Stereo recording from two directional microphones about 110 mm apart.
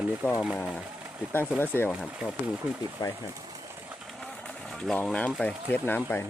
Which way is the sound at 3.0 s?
30° left (ahead or behind).